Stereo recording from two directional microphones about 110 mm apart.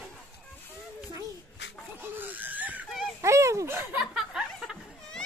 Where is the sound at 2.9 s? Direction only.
Centre (ahead or behind).